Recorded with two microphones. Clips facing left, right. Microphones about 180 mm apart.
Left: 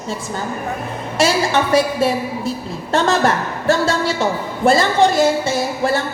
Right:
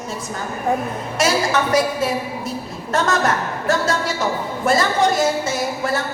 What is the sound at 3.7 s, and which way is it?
A woman's voice, 30° left (ahead or behind).